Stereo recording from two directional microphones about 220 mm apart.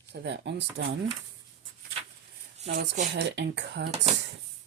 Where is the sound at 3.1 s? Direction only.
50° right (ahead or behind).